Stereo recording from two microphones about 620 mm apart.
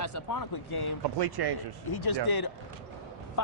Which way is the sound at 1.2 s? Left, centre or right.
Right.